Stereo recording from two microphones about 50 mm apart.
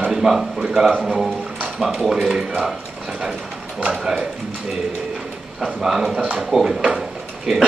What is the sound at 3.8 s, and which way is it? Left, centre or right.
Speech, centre.